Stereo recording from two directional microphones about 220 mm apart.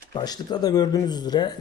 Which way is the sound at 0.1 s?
20° left (ahead or behind).